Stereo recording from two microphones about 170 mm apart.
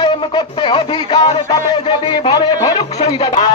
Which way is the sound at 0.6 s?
30° left (ahead or behind).